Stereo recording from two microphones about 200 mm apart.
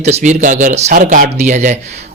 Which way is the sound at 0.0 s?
35° right (ahead or behind).